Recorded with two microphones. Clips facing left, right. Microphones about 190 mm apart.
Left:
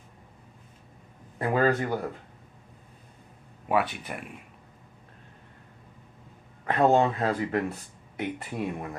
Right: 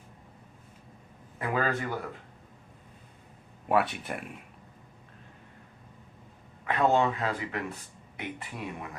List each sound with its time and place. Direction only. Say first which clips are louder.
1.4 s speech: left 5 dB; 35° left (ahead or behind)
3.7 s speech: even; centre (ahead or behind)
6.7 s speech: left 3 dB; 40° left (ahead or behind)